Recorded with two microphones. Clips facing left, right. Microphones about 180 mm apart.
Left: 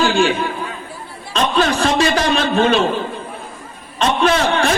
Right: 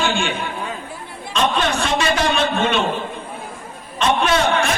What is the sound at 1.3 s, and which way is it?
A man's voice, 35° left (ahead or behind).